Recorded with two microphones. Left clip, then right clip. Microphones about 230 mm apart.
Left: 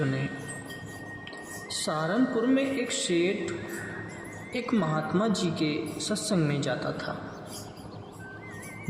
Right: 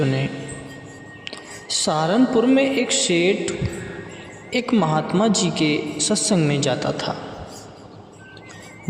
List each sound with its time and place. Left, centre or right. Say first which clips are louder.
0.0 s a man's voice: right 8 dB; right
1.7 s a man's voice: right 9 dB; right
4.5 s a man's voice: right 9 dB; right